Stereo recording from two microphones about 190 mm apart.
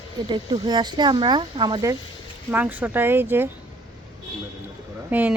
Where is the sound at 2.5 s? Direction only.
10° right (ahead or behind).